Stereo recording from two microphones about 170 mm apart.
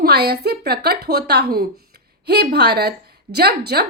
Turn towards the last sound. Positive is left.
turn(degrees=-70)  # may be behind; listen again after turning